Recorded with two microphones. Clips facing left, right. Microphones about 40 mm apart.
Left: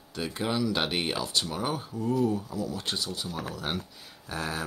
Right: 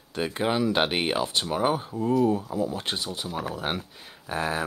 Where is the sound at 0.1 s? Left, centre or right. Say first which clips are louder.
Right 4 dB; right.